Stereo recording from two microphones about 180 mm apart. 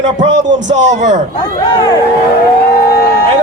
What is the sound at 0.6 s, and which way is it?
Speech, 40° right (ahead or behind).